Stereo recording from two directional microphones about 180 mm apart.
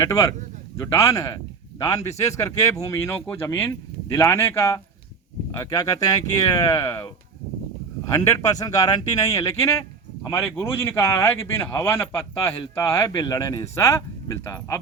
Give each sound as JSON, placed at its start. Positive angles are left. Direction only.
{"t": 0.0, "sound": "a man's voice", "side_deg": 15}
{"t": 8.1, "sound": "a man's voice", "side_deg": 15}